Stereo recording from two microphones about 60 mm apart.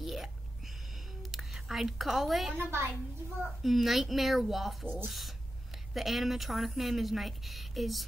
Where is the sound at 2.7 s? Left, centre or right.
Right.